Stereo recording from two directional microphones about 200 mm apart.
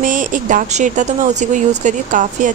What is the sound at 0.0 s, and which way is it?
Speech, 40° right (ahead or behind).